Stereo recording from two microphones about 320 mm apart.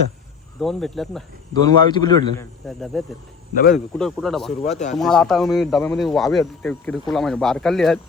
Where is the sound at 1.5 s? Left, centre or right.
Centre.